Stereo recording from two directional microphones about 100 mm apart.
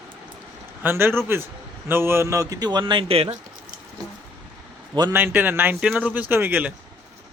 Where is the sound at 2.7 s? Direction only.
50° right (ahead or behind).